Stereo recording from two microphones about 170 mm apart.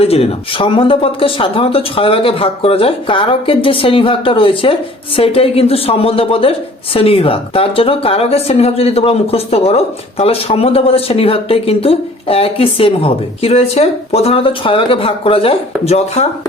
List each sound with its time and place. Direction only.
0.0 s speech: 35° left (ahead or behind)